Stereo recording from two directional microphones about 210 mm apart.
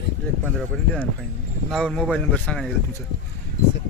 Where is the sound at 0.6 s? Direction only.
5° left (ahead or behind).